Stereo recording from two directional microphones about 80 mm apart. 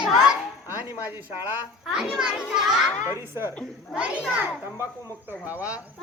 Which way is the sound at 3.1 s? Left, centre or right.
Right.